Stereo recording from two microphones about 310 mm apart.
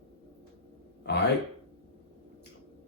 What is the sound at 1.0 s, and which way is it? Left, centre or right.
Speech, left.